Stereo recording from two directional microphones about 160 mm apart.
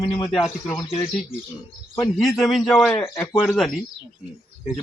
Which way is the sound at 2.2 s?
Centre (ahead or behind).